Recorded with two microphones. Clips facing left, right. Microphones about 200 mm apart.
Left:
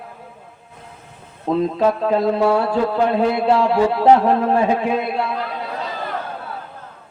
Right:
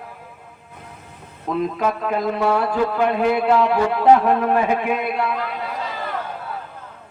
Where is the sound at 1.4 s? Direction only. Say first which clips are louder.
Left 4 dB; 30° left (ahead or behind).